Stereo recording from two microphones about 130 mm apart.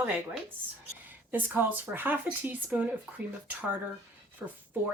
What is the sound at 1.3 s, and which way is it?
Speech, 15° right (ahead or behind).